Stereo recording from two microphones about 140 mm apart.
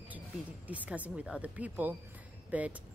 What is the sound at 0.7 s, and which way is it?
Speech, 10° right (ahead or behind).